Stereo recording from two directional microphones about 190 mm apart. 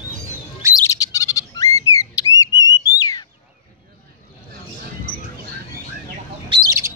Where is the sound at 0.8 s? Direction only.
20° left (ahead or behind).